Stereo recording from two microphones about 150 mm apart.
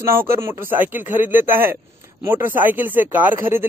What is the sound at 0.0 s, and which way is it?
Speech, 15° right (ahead or behind).